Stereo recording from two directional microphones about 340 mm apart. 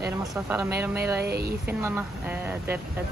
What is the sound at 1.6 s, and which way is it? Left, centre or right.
Speech, centre.